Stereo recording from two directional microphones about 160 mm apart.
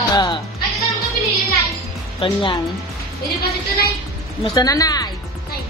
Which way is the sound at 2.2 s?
30° left (ahead or behind).